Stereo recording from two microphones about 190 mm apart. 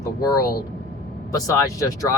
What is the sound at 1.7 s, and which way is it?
Speech, 20° left (ahead or behind).